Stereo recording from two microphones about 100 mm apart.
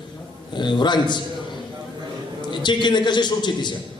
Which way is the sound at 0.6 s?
50° left (ahead or behind).